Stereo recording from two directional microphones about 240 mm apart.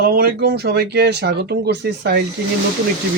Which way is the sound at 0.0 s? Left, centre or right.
Right.